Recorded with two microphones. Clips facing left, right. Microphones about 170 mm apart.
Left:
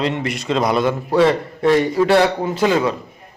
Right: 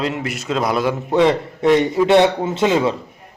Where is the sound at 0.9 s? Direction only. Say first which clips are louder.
Even; 20° right (ahead or behind).